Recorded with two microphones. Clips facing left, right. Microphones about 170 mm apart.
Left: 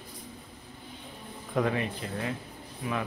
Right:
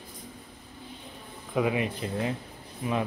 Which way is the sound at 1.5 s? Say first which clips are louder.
Right 1 dB; 5° right (ahead or behind).